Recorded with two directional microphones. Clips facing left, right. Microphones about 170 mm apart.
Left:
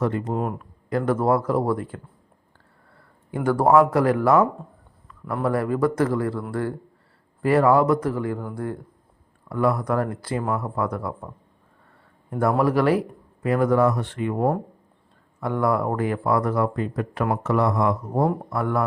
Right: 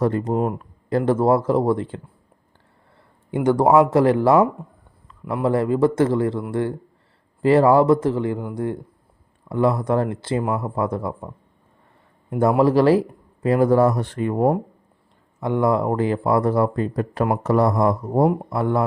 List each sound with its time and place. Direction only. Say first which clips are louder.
0.0 s speech: right 4 dB; 35° right (ahead or behind)
3.3 s speech: right 2 dB; 20° right (ahead or behind)
5.2 s a man's voice: right 3 dB; 15° right (ahead or behind)
12.3 s a man's voice: right 4 dB; 25° right (ahead or behind); by 14.3 s 40° right (ahead or behind)
14.3 s a man's voice: right 4 dB; 15° right (ahead or behind); by 17.9 s 40° right (ahead or behind)
18.5 s speech: right 3 dB; 25° right (ahead or behind)